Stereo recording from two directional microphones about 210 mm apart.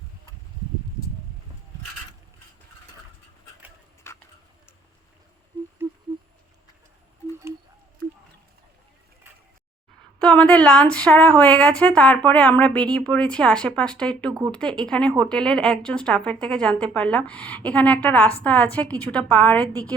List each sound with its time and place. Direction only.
4.1 s tick-tock: 10° left (ahead or behind)
10.2 s a woman's voice: 5° left (ahead or behind)
19.5 s a woman's voice: 15° right (ahead or behind)